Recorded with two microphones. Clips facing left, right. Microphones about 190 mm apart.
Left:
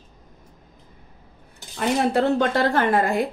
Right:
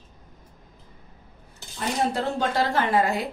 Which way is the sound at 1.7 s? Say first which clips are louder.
Left 5 dB; 65° left (ahead or behind).